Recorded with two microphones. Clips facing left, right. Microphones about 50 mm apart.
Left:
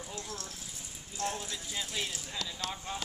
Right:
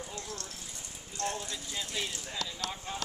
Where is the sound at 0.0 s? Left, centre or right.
Centre.